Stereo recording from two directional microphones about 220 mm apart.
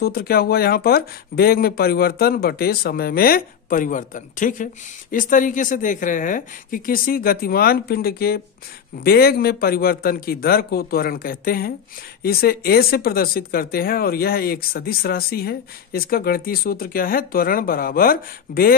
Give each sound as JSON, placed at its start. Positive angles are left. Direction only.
{"t": 0.0, "sound": "speech", "side_deg": 45}